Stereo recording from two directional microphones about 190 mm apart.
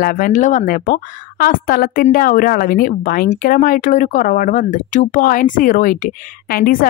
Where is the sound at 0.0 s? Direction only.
45° left (ahead or behind).